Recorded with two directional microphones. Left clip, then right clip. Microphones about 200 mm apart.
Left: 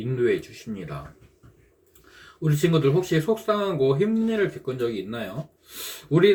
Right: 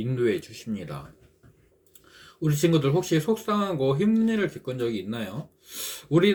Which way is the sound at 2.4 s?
50° right (ahead or behind).